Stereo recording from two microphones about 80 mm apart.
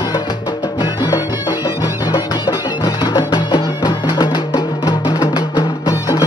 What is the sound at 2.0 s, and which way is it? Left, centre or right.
Music, left.